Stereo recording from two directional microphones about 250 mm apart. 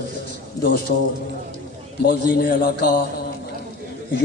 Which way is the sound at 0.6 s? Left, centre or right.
Left.